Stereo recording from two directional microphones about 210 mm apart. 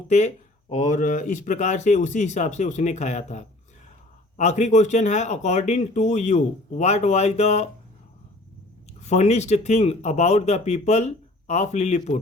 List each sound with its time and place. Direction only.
0.7 s speech: 40° left (ahead or behind)
9.0 s speech: 30° left (ahead or behind)